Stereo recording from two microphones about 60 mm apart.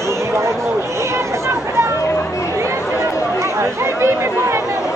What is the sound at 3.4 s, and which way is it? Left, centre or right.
Chatter, right.